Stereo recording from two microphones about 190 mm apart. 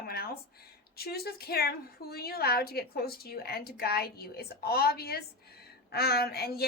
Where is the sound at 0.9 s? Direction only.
55° left (ahead or behind).